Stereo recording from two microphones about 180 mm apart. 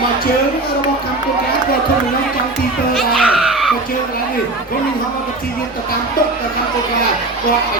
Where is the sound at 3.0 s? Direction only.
5° right (ahead or behind).